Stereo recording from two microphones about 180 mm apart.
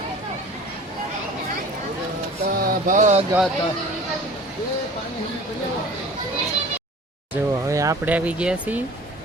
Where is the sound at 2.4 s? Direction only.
55° right (ahead or behind).